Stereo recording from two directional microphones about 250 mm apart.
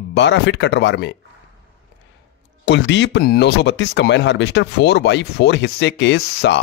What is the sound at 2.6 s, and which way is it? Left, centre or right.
Speech, left.